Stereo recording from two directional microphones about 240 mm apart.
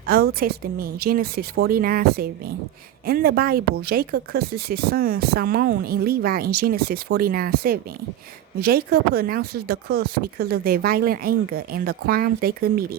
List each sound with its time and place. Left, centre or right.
0.1 s speech: right